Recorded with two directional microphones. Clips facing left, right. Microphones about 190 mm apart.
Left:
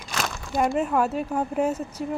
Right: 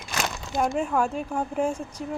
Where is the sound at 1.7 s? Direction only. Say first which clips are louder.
Left 3 dB; 10° right (ahead or behind).